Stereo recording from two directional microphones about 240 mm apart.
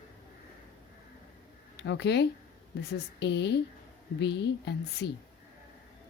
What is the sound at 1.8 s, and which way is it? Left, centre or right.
A woman's voice, left.